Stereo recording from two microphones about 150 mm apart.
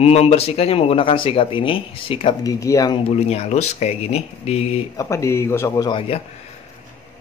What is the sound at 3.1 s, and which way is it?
Speech, 45° left (ahead or behind).